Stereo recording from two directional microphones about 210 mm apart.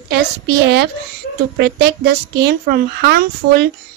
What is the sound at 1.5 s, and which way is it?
Speech, 50° right (ahead or behind).